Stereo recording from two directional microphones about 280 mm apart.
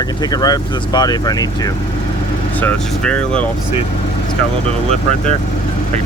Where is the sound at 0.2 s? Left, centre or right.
Centre.